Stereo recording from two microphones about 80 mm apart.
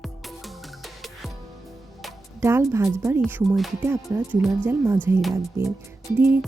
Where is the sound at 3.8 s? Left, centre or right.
Right.